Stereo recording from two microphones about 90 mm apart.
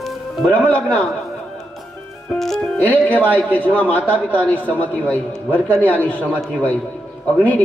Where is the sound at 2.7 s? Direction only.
20° left (ahead or behind).